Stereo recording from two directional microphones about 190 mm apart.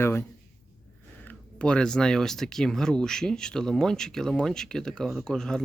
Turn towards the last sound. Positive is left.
turn(degrees=5)  # may be behind; listen again after turning